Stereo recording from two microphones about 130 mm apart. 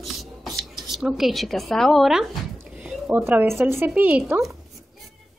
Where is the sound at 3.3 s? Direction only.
20° right (ahead or behind); by 4.6 s centre (ahead or behind).